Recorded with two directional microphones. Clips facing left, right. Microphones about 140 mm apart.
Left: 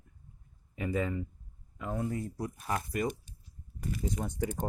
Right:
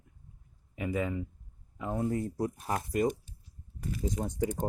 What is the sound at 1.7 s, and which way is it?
Speech, 25° right (ahead or behind).